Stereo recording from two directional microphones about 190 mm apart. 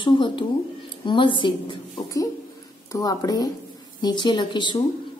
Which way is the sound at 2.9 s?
20° left (ahead or behind).